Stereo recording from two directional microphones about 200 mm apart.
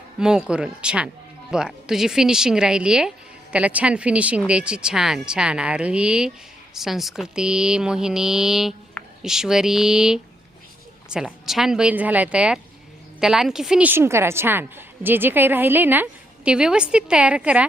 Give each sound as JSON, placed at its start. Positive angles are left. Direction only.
{"t": 0.2, "sound": "a woman's voice", "side_deg": -5}